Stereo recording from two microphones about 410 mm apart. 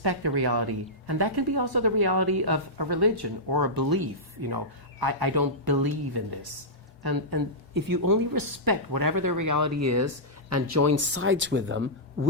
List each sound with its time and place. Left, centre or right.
0.0 s a woman's voice: right